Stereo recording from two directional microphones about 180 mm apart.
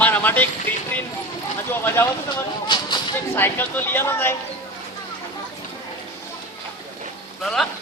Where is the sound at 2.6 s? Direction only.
25° left (ahead or behind).